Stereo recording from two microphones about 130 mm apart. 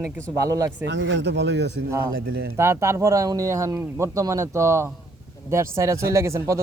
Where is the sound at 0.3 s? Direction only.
25° right (ahead or behind).